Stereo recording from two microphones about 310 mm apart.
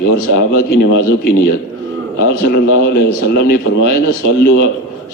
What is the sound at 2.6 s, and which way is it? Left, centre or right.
A man's voice, left.